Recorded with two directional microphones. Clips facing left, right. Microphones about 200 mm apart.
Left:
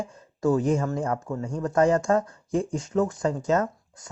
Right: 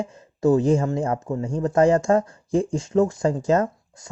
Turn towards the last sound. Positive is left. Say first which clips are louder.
# right 4 dB
turn(degrees=-30)  # may be behind; listen again after turning